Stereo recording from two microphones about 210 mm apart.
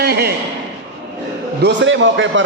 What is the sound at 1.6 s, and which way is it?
Speech, 60° right (ahead or behind).